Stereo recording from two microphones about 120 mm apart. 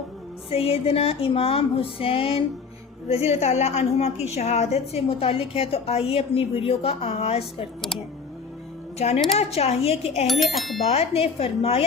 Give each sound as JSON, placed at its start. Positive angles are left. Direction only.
{"t": 0.5, "sound": "music", "side_deg": 55}
{"t": 3.1, "sound": "a woman's voice", "side_deg": 60}
{"t": 7.8, "sound": "speech", "side_deg": 5}
{"t": 9.0, "sound": "a woman's voice", "side_deg": 65}
{"t": 10.2, "sound": "speech", "side_deg": 0}
{"t": 10.8, "sound": "a woman's voice", "side_deg": 55}